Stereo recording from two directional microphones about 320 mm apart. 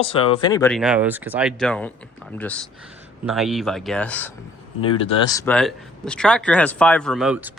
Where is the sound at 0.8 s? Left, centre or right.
Centre.